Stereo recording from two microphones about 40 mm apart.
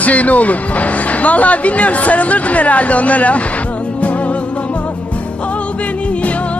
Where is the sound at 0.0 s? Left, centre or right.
Left.